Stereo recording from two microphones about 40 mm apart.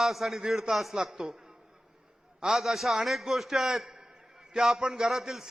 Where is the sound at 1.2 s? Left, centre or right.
Right.